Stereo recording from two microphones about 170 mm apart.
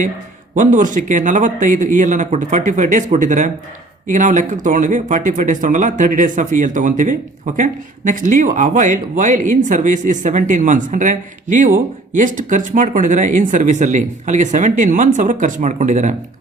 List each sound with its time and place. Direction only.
0.5 s speech: 50° right (ahead or behind)